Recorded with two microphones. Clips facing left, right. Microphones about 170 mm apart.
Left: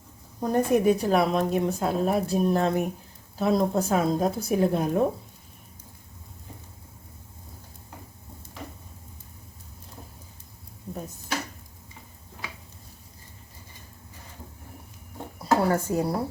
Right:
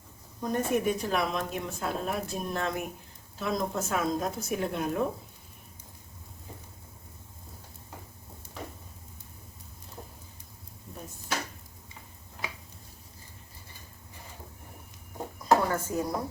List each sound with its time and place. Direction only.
0.3 s speech: 40° left (ahead or behind)
15.4 s dishes: 35° left (ahead or behind)